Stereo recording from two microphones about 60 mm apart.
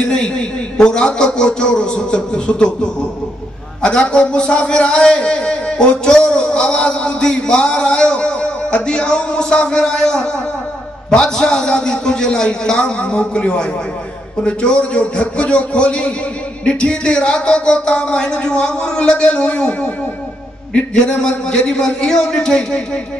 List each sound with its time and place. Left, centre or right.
0.0 s a man's voice: centre